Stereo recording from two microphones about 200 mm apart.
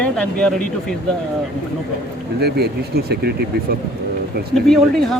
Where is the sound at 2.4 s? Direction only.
55° right (ahead or behind).